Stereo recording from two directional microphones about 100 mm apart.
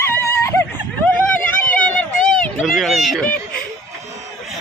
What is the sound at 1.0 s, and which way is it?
Vehicle, 15° left (ahead or behind).